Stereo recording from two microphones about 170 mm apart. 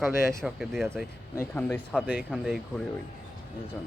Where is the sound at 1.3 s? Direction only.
10° left (ahead or behind).